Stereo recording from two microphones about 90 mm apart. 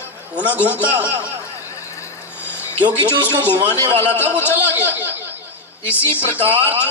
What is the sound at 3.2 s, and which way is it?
A man's voice, 25° left (ahead or behind).